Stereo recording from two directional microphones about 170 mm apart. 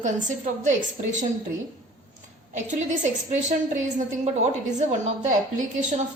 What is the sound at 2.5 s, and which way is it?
A woman's voice, 45° right (ahead or behind).